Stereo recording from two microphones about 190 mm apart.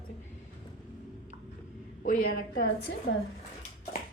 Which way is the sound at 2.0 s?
50° left (ahead or behind).